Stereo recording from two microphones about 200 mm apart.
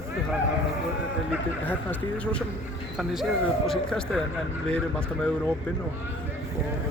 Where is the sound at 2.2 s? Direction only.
5° left (ahead or behind).